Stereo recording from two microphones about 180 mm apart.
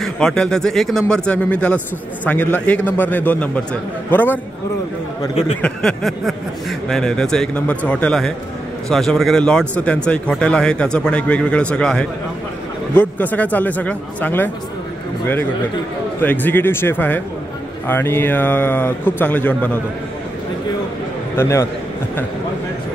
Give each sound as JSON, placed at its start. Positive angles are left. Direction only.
{"t": 0.0, "sound": "speech", "side_deg": 5}
{"t": 5.6, "sound": "speech", "side_deg": 5}
{"t": 16.2, "sound": "speech", "side_deg": 10}
{"t": 21.4, "sound": "speech", "side_deg": 15}